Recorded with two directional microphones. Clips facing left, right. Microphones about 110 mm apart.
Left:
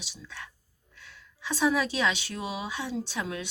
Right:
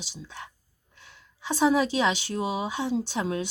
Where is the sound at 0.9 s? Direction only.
20° right (ahead or behind).